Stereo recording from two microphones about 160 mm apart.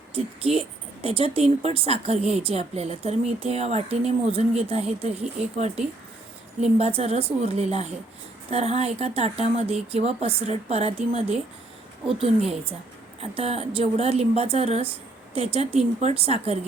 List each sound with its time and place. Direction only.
0.1 s a woman's voice: 35° right (ahead or behind)
13.3 s a woman's voice: 40° right (ahead or behind)